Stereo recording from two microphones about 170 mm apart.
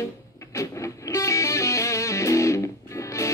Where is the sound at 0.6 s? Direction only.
15° left (ahead or behind).